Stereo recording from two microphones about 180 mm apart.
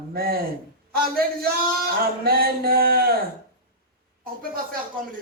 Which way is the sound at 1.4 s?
55° right (ahead or behind).